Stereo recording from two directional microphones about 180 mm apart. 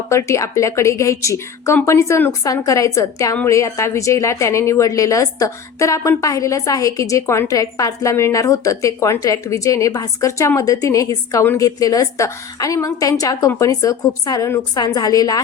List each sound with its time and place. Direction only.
0.1 s a woman's voice: 15° left (ahead or behind)